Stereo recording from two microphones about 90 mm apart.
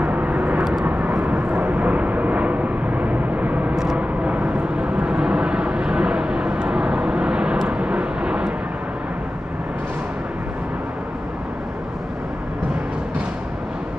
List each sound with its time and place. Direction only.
0.0 s vehicle: 15° right (ahead or behind)
3.7 s vehicle: 5° right (ahead or behind)